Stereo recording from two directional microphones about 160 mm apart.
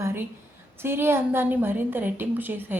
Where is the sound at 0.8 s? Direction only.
15° right (ahead or behind).